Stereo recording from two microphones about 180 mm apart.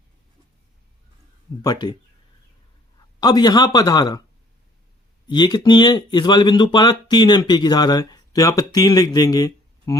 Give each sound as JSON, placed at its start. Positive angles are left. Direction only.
{"t": 1.6, "sound": "speech", "side_deg": 25}
{"t": 3.2, "sound": "speech", "side_deg": 20}
{"t": 5.3, "sound": "speech", "side_deg": 25}